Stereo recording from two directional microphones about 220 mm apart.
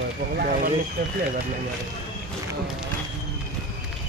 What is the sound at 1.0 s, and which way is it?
Speech, 45° right (ahead or behind).